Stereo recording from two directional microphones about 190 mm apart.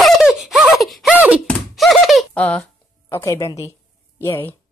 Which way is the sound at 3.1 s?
15° left (ahead or behind).